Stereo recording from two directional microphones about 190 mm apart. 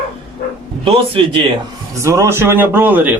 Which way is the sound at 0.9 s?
30° right (ahead or behind).